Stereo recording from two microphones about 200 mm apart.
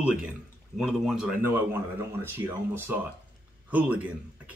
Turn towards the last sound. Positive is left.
turn(degrees=-10)  # may be behind; listen again after turning